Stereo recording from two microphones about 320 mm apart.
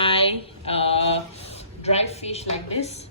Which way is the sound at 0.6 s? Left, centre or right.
Centre.